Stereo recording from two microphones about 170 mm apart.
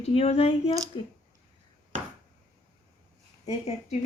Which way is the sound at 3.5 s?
40° left (ahead or behind).